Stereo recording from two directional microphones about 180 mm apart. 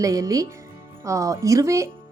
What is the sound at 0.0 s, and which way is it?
A woman's voice, 20° right (ahead or behind).